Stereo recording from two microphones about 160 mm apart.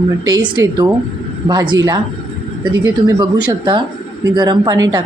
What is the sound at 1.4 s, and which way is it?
A woman's voice, 25° right (ahead or behind).